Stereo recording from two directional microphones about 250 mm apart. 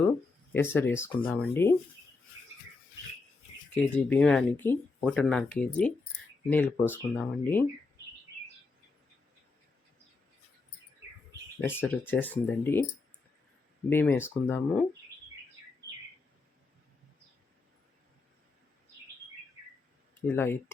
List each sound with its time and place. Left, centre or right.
0.5 s speech: centre
4.1 s speech: centre
11.6 s speech: centre
13.9 s speech: centre
20.2 s speech: centre